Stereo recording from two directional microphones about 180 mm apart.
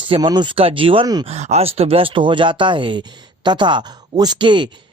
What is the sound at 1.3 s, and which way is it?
Speech, 35° right (ahead or behind).